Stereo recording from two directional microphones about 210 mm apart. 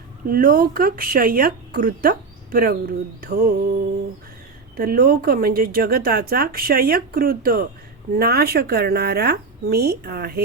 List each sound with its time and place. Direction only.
0.3 s speech: 45° right (ahead or behind)
4.8 s speech: 45° right (ahead or behind)